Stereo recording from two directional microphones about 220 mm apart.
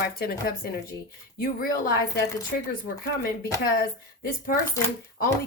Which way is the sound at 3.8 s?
40° left (ahead or behind).